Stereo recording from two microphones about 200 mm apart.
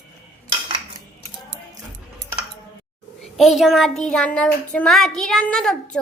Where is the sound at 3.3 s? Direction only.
Centre (ahead or behind).